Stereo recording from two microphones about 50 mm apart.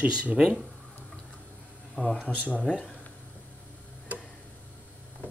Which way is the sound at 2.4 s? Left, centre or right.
Left.